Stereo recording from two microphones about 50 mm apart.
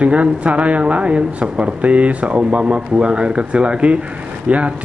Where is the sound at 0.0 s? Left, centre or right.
Right.